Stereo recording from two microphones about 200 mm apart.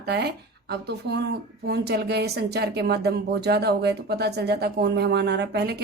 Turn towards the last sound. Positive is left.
turn(degrees=-55)  # may be behind; listen again after turning